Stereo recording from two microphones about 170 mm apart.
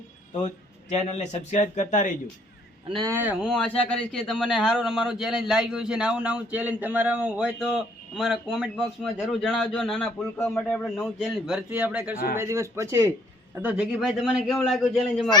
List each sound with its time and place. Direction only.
0.4 s speech: 45° left (ahead or behind)
3.1 s speech: 10° right (ahead or behind)
3.8 s a man's voice: 5° left (ahead or behind)
10.3 s a man's voice: 15° left (ahead or behind); by 12.1 s 10° right (ahead or behind)
12.1 s a man's voice: 60° left (ahead or behind)
12.4 s a man's voice: 15° right (ahead or behind); by 14.8 s centre (ahead or behind)